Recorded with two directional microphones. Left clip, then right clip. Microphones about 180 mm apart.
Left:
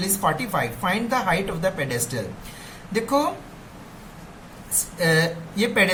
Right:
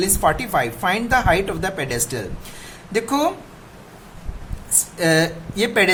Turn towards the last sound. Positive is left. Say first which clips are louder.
# right 3 dB
turn(degrees=-50)  # may be behind; listen again after turning